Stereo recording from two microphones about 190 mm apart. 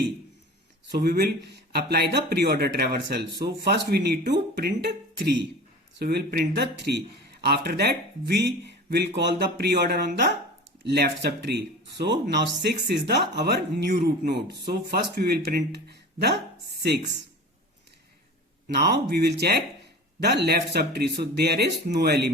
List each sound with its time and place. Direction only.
0.9 s speech: 55° right (ahead or behind)
18.7 s speech: 60° right (ahead or behind)